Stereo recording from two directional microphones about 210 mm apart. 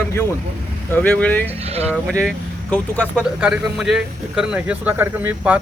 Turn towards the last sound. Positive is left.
turn(degrees=-10)  # may be behind; listen again after turning